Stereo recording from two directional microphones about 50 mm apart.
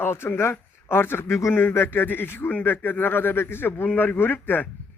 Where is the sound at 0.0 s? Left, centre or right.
Left.